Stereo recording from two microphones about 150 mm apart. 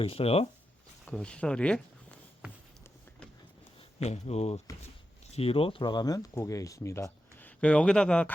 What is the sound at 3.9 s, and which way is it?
Speech, 45° left (ahead or behind).